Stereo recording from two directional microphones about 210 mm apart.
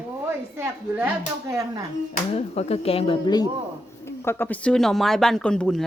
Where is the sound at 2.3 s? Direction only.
30° left (ahead or behind).